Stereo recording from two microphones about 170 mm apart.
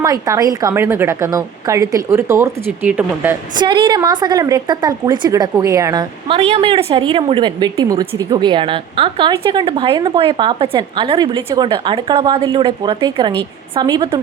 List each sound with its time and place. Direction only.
0.0 s a woman's voice: 20° right (ahead or behind)
3.5 s a woman's voice: 25° right (ahead or behind)